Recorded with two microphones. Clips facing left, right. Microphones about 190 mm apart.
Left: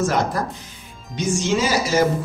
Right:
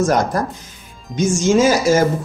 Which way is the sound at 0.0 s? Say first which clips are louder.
Right 4 dB; 45° right (ahead or behind).